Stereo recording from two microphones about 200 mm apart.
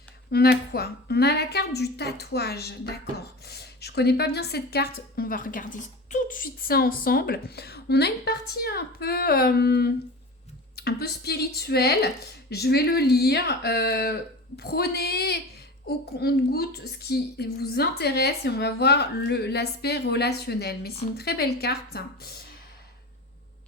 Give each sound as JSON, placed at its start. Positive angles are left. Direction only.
{"t": 0.3, "sound": "a woman's voice", "side_deg": 50}